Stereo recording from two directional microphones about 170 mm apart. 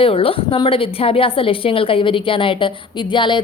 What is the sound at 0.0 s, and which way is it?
A woman's voice, 35° left (ahead or behind).